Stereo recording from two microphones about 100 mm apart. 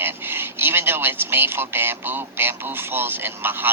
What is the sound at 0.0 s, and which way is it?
A man's voice, 20° right (ahead or behind).